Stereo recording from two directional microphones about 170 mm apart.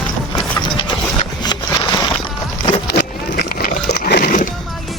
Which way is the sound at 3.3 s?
70° left (ahead or behind).